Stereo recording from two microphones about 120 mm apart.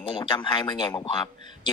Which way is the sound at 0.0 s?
45° left (ahead or behind).